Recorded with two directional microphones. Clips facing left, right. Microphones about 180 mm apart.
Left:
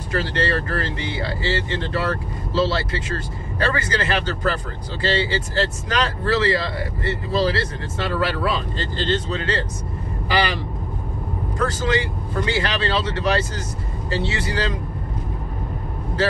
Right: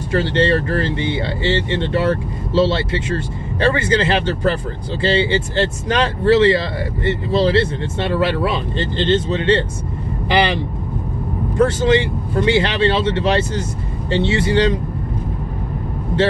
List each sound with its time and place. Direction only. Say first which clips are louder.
0.1 s speech: right 6 dB; 25° right (ahead or behind)